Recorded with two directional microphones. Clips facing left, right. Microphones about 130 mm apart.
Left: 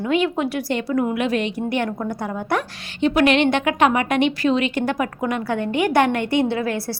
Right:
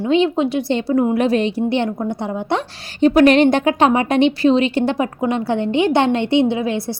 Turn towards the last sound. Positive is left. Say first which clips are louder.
# right 3 dB
turn(degrees=-20)  # may be behind; listen again after turning